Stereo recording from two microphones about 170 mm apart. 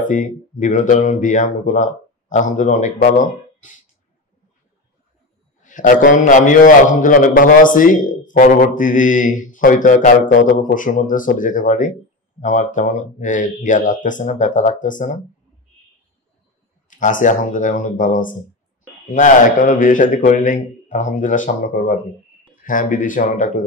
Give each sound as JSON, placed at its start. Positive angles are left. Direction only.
{"t": 0.0, "sound": "a man's voice", "side_deg": 50}
{"t": 5.6, "sound": "a man's voice", "side_deg": 50}
{"t": 16.9, "sound": "a man's voice", "side_deg": 50}